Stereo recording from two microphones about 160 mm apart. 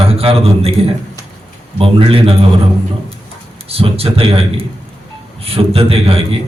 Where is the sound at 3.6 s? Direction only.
40° right (ahead or behind).